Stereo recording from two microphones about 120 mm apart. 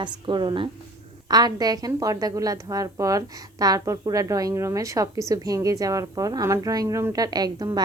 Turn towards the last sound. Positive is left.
turn(degrees=-35)  # may be behind; listen again after turning